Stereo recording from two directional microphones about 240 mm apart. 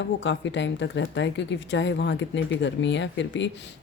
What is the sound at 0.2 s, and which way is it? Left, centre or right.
Speech, left.